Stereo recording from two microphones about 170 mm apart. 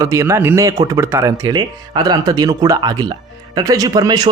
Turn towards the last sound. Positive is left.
turn(degrees=-25)  # may be behind; listen again after turning